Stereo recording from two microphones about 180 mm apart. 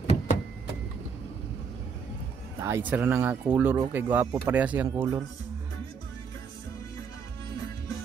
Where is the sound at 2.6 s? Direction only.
10° right (ahead or behind).